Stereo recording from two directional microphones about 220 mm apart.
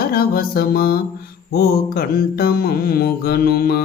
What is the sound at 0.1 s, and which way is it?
Mantra, 45° left (ahead or behind).